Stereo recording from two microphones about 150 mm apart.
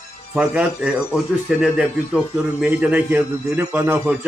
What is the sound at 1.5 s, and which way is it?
A man's voice, 5° right (ahead or behind).